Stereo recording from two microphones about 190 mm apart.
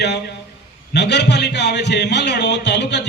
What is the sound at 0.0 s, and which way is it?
A man's voice, 65° left (ahead or behind).